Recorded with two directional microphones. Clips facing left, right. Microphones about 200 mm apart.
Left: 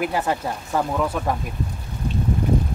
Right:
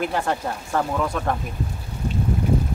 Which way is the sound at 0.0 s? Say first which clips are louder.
Left 1 dB; 5° left (ahead or behind).